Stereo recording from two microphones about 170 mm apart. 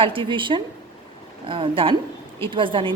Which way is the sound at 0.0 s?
30° right (ahead or behind).